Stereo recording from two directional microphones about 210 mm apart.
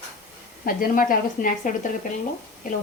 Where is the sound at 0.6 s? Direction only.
40° left (ahead or behind).